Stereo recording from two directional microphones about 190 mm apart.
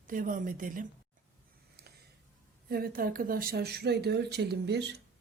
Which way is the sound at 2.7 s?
50° right (ahead or behind).